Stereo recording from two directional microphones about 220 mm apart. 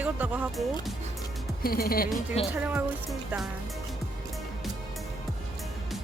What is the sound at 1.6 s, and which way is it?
Speech, 45° left (ahead or behind).